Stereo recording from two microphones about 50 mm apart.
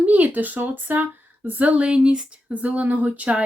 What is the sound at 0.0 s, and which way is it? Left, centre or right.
Speech, right.